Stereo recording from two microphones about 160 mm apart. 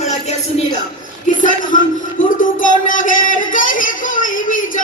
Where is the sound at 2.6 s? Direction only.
55° left (ahead or behind).